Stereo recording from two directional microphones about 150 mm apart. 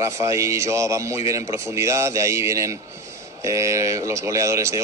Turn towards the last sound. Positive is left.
turn(degrees=-20)  # may be behind; listen again after turning